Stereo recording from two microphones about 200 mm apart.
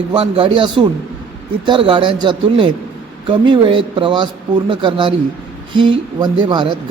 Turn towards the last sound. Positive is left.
turn(degrees=-20)  # may be behind; listen again after turning